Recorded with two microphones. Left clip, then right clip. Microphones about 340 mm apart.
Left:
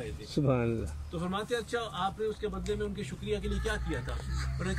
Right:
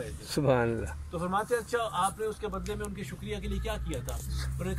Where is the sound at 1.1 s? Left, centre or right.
Centre.